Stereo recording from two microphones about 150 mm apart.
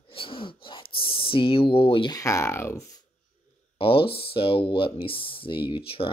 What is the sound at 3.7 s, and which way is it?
Speech, 35° left (ahead or behind).